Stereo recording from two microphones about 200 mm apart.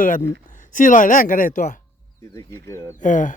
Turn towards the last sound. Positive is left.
turn(degrees=40)  # may be behind; listen again after turning